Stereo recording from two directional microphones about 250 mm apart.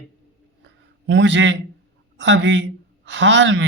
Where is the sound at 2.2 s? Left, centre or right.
Right.